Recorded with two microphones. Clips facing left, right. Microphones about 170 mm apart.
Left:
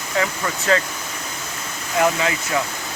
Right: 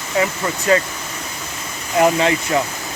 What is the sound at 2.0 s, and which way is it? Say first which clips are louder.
Speech: right 4 dB; 25° right (ahead or behind).